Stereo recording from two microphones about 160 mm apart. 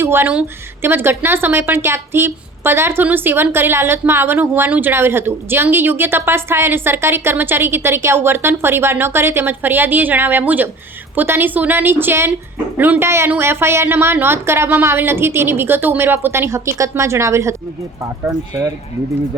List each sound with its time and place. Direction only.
0.0 s a woman's voice: 15° right (ahead or behind)